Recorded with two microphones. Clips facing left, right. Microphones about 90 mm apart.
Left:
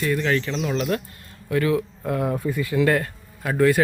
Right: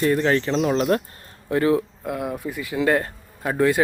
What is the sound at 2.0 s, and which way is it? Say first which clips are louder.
Speech: left 3 dB; 10° right (ahead or behind).